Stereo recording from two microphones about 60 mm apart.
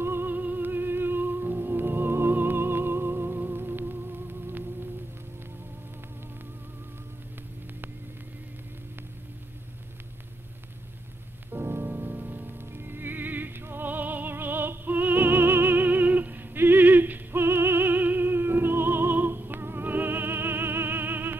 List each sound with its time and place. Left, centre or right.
0.0 s music: right
11.5 s rain on surface: right
11.9 s music: right